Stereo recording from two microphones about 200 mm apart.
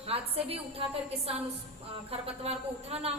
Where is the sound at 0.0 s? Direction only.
30° right (ahead or behind).